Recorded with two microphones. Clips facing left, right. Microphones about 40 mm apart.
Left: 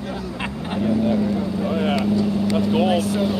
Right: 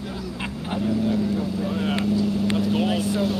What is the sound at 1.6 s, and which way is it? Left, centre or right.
Vehicle, left.